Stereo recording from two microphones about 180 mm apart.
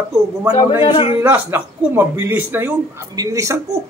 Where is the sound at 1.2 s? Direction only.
10° right (ahead or behind).